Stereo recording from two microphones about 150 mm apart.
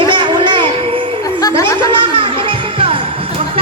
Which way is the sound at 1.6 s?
35° right (ahead or behind).